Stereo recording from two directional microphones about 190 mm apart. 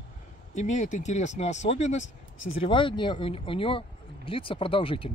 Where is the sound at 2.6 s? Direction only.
25° left (ahead or behind).